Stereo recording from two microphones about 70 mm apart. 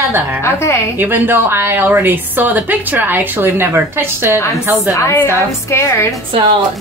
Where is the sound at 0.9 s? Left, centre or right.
Right.